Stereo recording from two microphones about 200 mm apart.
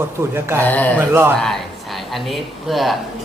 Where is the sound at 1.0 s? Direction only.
10° right (ahead or behind).